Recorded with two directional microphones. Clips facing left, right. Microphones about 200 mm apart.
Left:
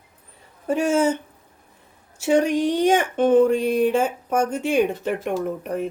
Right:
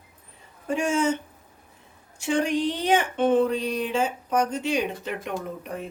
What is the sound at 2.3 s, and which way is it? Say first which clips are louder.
Speech: left 5 dB; 40° left (ahead or behind).